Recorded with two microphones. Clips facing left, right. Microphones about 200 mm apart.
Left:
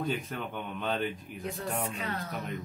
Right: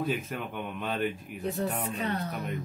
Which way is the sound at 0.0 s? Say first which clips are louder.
Right 2 dB; 5° right (ahead or behind).